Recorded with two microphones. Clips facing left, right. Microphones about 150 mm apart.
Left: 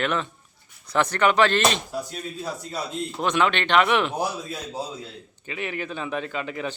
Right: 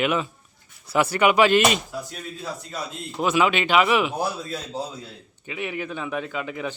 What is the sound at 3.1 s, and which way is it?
Speech, 5° right (ahead or behind).